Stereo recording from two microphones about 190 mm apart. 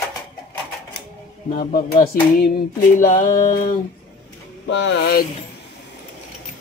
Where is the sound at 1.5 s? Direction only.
50° left (ahead or behind).